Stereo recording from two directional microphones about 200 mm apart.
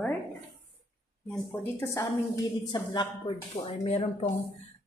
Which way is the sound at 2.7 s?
20° left (ahead or behind).